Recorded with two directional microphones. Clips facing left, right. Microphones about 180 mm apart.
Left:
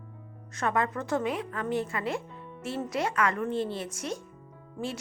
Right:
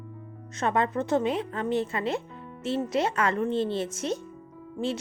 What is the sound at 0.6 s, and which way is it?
Speech, 25° right (ahead or behind).